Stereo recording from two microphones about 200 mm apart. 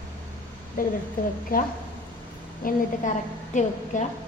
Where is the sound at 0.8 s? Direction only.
45° left (ahead or behind).